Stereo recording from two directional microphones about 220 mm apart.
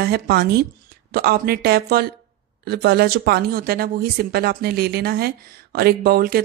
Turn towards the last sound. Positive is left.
turn(degrees=-45)  # may be behind; listen again after turning